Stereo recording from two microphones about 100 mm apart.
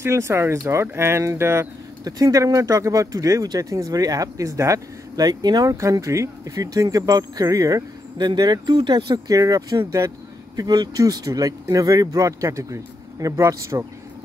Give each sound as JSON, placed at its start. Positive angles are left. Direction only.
{"t": 0.0, "sound": "speech", "side_deg": -30}
{"t": 2.0, "sound": "speech", "side_deg": -40}
{"t": 8.2, "sound": "speech", "side_deg": -45}